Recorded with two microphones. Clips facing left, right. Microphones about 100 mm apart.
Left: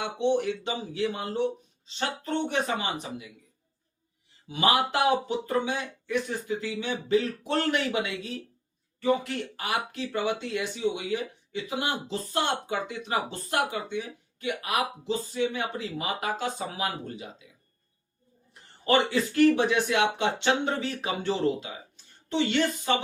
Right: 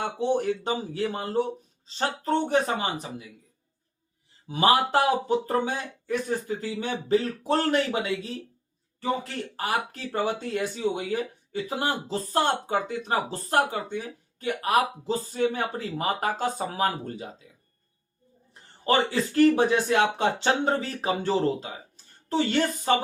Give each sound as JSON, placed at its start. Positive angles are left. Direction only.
{"t": 0.0, "sound": "speech", "side_deg": -40}
{"t": 4.4, "sound": "speech", "side_deg": -35}
{"t": 18.9, "sound": "speech", "side_deg": -35}